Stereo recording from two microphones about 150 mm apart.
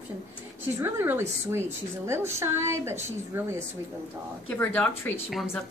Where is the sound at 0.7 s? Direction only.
15° right (ahead or behind).